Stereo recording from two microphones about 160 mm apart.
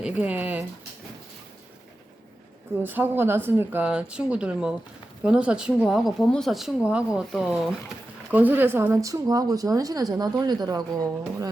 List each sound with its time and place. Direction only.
0.0 s speech: 10° right (ahead or behind)
2.8 s speech: 10° right (ahead or behind)